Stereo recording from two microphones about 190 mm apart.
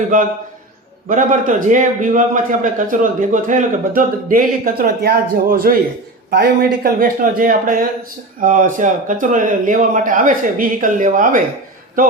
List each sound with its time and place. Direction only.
0.1 s a man's voice: 45° right (ahead or behind)